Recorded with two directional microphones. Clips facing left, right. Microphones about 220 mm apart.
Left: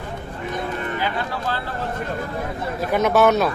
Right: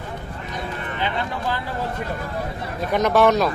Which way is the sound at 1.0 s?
15° right (ahead or behind).